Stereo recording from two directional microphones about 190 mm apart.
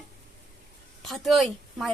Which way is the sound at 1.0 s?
Centre (ahead or behind).